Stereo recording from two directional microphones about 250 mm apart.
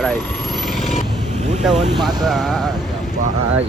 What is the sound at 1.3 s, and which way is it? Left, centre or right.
Vehicle, right.